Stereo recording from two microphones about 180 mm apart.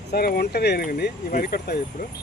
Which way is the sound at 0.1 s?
60° left (ahead or behind).